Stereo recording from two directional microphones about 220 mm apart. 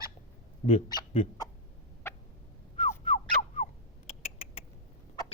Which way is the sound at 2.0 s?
10° left (ahead or behind).